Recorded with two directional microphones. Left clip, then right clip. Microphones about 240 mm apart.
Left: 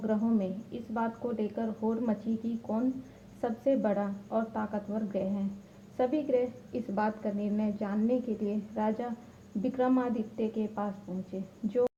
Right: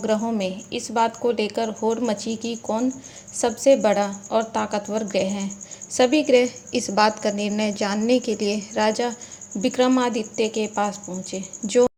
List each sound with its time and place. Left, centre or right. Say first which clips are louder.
0.1 s a woman's voice: right 8 dB; right